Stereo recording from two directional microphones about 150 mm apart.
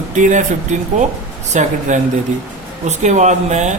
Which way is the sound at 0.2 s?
55° right (ahead or behind).